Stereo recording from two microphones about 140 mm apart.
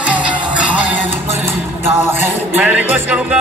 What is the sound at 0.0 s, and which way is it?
Music, 10° right (ahead or behind).